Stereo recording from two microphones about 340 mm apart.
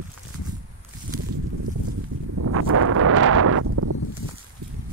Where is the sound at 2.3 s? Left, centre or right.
Right.